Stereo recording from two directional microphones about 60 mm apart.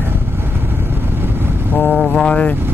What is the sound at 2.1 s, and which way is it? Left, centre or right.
Speech, centre.